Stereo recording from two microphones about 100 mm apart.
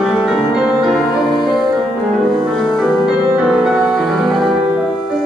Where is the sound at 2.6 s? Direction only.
5° left (ahead or behind).